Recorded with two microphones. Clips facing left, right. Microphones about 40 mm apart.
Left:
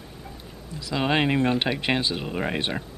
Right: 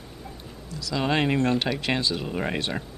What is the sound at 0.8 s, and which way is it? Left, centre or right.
Speech, left.